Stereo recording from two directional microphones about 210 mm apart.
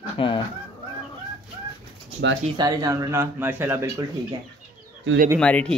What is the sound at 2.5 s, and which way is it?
Speech, 20° right (ahead or behind).